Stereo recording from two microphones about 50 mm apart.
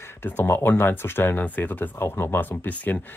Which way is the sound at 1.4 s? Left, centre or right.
Left.